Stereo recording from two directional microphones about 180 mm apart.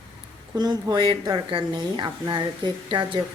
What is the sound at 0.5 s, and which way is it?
Speech, 20° right (ahead or behind).